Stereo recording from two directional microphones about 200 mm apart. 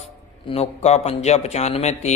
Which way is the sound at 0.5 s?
30° left (ahead or behind).